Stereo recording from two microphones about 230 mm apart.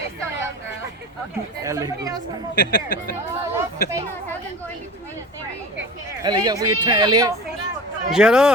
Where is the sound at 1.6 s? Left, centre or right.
Centre.